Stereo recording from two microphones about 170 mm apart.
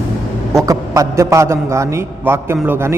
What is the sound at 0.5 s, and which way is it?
A man's voice, 20° right (ahead or behind).